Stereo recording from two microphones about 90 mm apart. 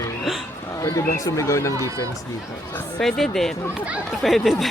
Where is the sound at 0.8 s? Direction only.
40° left (ahead or behind).